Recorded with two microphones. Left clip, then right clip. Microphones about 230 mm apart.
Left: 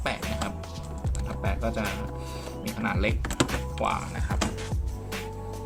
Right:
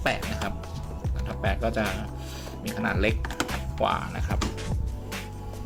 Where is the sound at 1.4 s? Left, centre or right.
Right.